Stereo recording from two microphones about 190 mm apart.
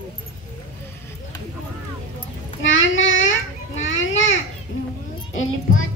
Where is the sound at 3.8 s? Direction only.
85° left.